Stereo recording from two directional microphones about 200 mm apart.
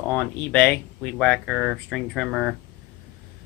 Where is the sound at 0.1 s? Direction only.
5° left (ahead or behind).